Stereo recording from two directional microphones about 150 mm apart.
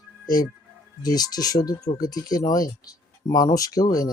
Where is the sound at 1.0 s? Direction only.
25° left (ahead or behind).